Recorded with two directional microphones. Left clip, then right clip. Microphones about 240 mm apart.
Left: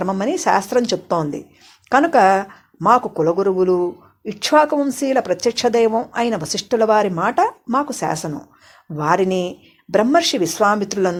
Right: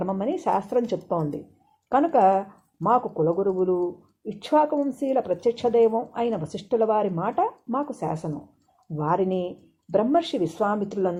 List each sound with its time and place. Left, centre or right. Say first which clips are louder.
0.0 s speech: left 7 dB; left
3.2 s speech: left 6 dB; left